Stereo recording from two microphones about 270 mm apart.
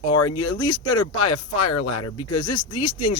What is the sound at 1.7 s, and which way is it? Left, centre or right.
Speech, left.